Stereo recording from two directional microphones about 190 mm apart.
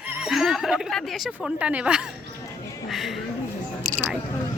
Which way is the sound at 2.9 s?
Centre (ahead or behind).